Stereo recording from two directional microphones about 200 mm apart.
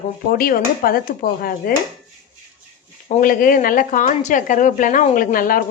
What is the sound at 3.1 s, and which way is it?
Speech, 40° left (ahead or behind).